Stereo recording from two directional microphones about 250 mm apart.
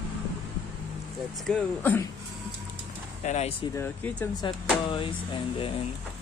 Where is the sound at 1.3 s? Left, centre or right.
Centre.